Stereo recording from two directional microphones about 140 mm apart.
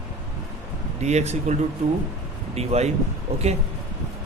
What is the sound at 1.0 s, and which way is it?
Speech, 55° right (ahead or behind).